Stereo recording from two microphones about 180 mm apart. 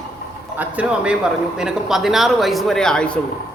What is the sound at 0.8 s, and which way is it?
A man's voice, 5° right (ahead or behind).